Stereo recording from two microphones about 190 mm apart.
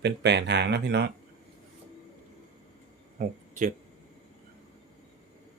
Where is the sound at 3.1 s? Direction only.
45° right (ahead or behind).